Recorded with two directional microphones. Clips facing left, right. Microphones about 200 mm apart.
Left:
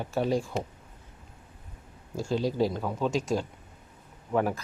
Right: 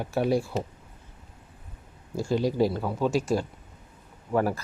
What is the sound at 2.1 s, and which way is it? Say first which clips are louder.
Speech: right 3 dB; 10° right (ahead or behind).